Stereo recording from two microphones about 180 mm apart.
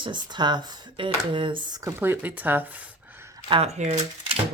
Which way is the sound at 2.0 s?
10° right (ahead or behind).